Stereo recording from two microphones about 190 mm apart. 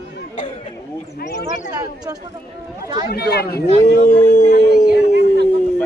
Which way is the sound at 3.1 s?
55° left (ahead or behind).